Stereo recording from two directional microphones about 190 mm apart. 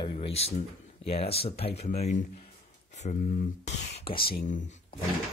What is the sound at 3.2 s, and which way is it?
Speech, 50° left (ahead or behind).